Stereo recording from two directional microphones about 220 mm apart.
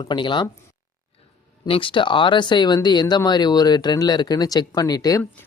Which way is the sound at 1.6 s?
25° left (ahead or behind).